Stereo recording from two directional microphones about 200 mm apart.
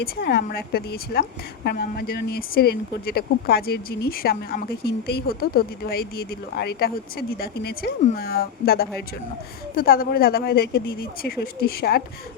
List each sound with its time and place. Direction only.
0.0 s a woman's voice: 55° left (ahead or behind)